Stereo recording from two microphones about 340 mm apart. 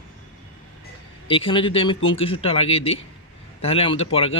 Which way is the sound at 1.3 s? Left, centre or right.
Centre.